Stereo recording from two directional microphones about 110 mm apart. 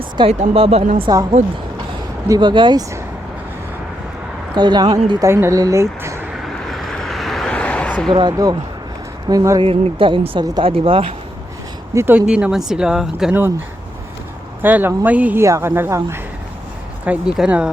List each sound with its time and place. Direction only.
0.3 s speech: 65° right (ahead or behind)
1.4 s speech: 90° right
2.4 s speech: 45° right (ahead or behind)
4.5 s speech: 40° right (ahead or behind)
5.3 s speech: 25° right (ahead or behind)
6.4 s a sound: centre (ahead or behind)
8.1 s speech: 40° right (ahead or behind)
9.6 s speech: 50° right (ahead or behind)
11.9 s speech: 20° right (ahead or behind)
12.2 s speech: 10° right (ahead or behind)
14.6 s speech: 15° right (ahead or behind)
15.4 s speech: 25° right (ahead or behind)
17.1 s speech: 5° right (ahead or behind)